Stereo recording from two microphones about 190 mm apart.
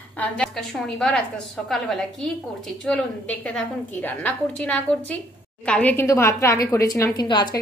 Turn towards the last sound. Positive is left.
turn(degrees=25)  # may be behind; listen again after turning